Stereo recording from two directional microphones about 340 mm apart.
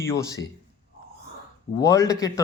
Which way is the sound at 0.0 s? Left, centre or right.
Centre.